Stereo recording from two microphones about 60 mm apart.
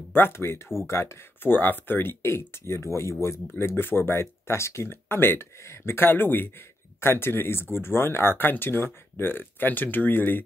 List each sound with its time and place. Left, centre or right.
0.1 s speech: left
1.4 s speech: left